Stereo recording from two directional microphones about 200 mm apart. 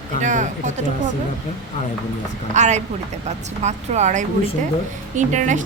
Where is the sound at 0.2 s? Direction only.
40° right (ahead or behind).